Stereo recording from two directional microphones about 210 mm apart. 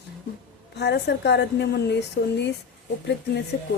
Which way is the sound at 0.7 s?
50° left (ahead or behind).